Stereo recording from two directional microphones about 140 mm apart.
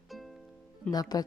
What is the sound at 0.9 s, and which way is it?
Speech, 25° left (ahead or behind).